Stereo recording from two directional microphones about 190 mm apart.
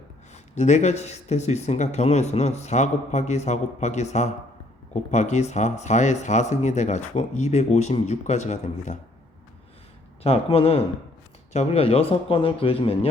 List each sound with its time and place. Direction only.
0.5 s speech: 40° left (ahead or behind)
10.2 s a man's voice: 30° left (ahead or behind)